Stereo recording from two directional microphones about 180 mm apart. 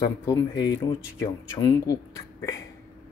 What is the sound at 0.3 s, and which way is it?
Speech, 20° left (ahead or behind).